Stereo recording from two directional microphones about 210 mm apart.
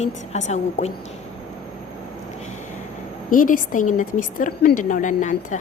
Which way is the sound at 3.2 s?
40° left (ahead or behind).